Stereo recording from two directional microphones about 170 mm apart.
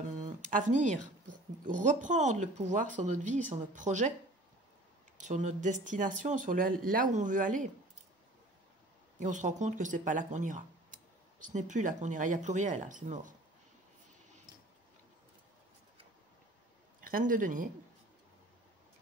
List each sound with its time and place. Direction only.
0.2 s a sound: 50° right (ahead or behind)
1.6 s speech: 50° right (ahead or behind)
5.1 s speech: 45° right (ahead or behind)
9.2 s speech: 45° right (ahead or behind)
17.0 s speech: 55° right (ahead or behind)